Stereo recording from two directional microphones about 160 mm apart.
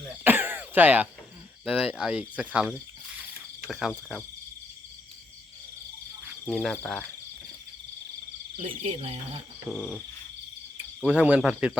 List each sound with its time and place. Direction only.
0.3 s throat clearing: 10° right (ahead or behind)
1.6 s speech: 5° right (ahead or behind)
6.5 s speech: 5° left (ahead or behind)
8.8 s speech: 40° right (ahead or behind)
9.6 s speech: 5° left (ahead or behind)
11.0 s speech: 10° right (ahead or behind)